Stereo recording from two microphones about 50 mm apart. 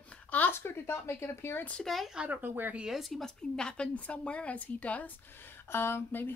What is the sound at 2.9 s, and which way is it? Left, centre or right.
A woman's voice, centre.